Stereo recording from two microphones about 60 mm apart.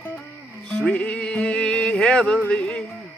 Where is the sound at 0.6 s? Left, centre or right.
Centre.